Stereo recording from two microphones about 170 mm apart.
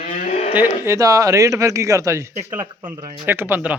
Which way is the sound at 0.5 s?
15° right (ahead or behind).